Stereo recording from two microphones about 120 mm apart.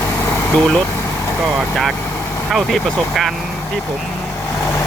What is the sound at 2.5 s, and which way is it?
Speech, 5° left (ahead or behind).